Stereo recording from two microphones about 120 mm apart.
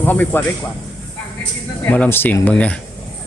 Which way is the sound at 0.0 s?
15° left (ahead or behind).